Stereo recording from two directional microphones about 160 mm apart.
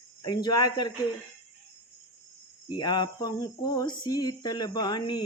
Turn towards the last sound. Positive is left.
turn(degrees=25)  # may be behind; listen again after turning